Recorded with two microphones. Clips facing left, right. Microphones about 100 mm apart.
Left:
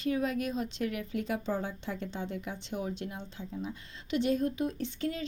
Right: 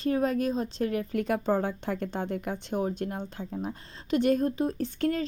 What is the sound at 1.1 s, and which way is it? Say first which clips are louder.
Speech: right 8 dB; 55° right (ahead or behind).